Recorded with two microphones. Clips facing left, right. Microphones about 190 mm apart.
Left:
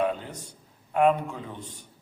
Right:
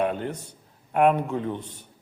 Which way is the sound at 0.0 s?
60° right (ahead or behind).